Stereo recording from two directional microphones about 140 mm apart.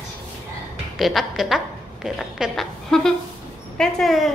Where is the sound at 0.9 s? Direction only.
Centre (ahead or behind).